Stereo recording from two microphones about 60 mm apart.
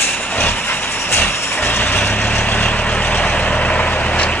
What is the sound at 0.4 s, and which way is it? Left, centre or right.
Vehicle, left.